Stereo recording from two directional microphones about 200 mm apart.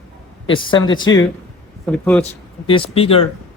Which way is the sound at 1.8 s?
5° left (ahead or behind).